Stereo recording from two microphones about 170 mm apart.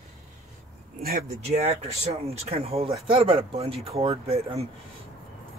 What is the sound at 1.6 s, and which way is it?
Speech, 35° right (ahead or behind).